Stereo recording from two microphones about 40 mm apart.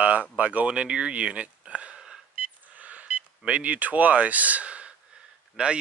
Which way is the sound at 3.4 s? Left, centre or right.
Right.